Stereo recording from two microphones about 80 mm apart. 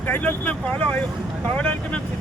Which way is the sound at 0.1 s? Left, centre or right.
Centre.